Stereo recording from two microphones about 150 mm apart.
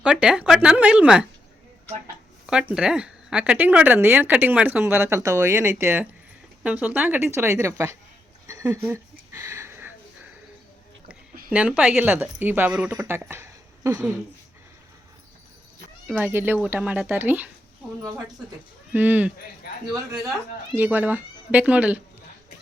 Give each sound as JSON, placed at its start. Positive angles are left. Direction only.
{"t": 0.0, "sound": "speech", "side_deg": -5}
{"t": 2.5, "sound": "speech", "side_deg": -5}
{"t": 8.9, "sound": "a sound", "side_deg": -15}
{"t": 11.5, "sound": "speech", "side_deg": -10}
{"t": 16.0, "sound": "speech", "side_deg": -10}
{"t": 18.9, "sound": "speech", "side_deg": -10}
{"t": 20.7, "sound": "speech", "side_deg": -10}